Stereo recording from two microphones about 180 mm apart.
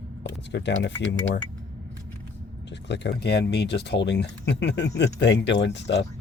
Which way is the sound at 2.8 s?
75° left (ahead or behind).